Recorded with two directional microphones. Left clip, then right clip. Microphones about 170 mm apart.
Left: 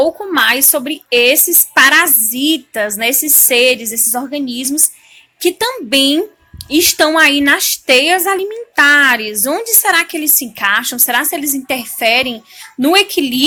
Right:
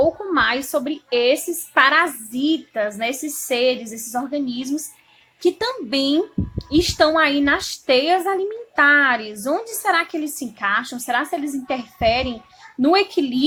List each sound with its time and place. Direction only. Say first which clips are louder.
0.0 s a woman's voice: left 5 dB; 25° left (ahead or behind)